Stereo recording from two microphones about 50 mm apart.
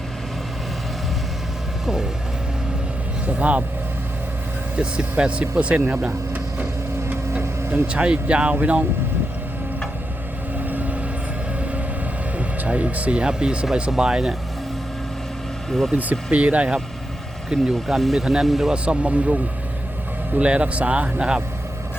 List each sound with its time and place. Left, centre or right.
3.2 s speech: right
4.8 s speech: right
7.9 s speech: right
10.7 s vehicle: right
12.4 s speech: right
16.0 s speech: right
17.5 s speech: centre
18.7 s speech: right
20.4 s speech: right